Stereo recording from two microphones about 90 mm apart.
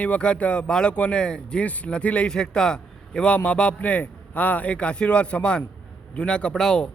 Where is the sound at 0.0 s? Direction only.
15° left (ahead or behind).